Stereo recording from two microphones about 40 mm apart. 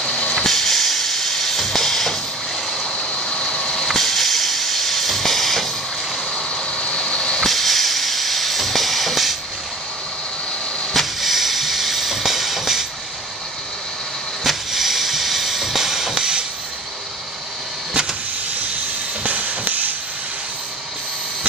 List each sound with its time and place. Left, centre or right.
0.0 s vehicle: left
0.4 s music: centre
2.8 s boat: left
3.8 s hiss: centre
6.3 s a sound: left
7.4 s hiss: centre
10.9 s music: centre
14.4 s music: centre
19.2 s music: right